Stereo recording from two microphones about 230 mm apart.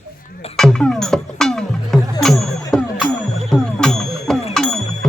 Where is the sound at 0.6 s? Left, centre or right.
Centre.